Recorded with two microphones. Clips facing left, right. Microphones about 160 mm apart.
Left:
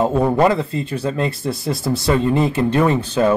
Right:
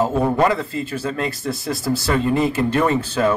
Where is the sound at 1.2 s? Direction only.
Centre (ahead or behind).